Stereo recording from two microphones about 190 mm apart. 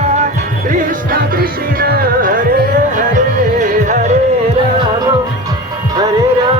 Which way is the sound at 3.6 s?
45° right (ahead or behind).